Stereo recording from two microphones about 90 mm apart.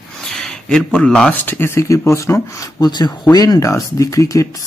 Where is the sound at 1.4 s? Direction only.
25° left (ahead or behind).